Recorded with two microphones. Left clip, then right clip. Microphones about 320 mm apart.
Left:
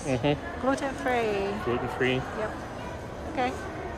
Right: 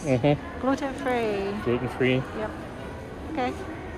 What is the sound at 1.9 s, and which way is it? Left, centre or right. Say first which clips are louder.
Speech: right 3 dB; centre.